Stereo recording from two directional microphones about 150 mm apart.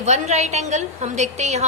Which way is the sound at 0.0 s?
50° right (ahead or behind).